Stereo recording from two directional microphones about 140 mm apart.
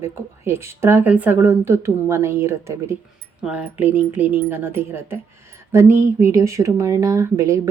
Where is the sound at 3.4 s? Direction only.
10° right (ahead or behind).